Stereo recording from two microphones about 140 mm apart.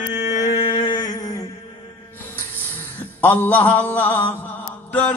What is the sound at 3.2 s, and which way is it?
Mantra, 15° left (ahead or behind).